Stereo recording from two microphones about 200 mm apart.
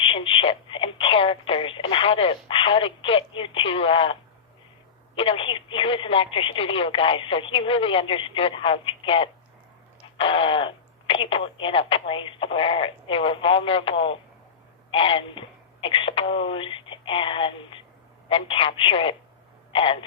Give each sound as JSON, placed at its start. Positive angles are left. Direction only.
{"t": 0.0, "sound": "speech", "side_deg": 25}